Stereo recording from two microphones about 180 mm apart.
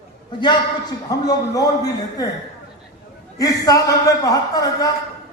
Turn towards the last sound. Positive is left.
turn(degrees=20)  # may be behind; listen again after turning